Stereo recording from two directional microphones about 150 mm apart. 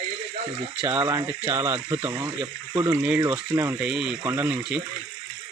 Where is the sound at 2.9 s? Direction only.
10° right (ahead or behind).